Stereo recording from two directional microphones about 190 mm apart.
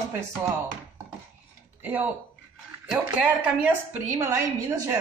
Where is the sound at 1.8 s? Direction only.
10° right (ahead or behind).